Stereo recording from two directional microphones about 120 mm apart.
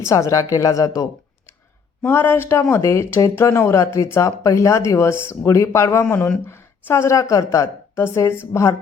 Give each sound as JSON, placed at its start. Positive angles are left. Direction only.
{"t": 0.1, "sound": "speech", "side_deg": 25}
{"t": 2.0, "sound": "speech", "side_deg": 20}
{"t": 6.1, "sound": "speech", "side_deg": 15}